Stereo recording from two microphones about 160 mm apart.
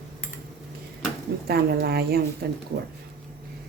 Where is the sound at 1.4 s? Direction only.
75° right (ahead or behind).